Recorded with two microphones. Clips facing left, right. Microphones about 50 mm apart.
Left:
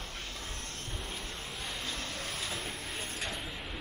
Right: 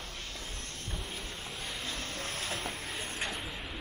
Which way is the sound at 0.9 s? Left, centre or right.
Centre.